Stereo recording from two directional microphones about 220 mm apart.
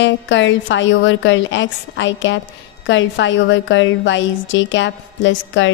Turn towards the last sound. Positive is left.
turn(degrees=55)  # may be behind; listen again after turning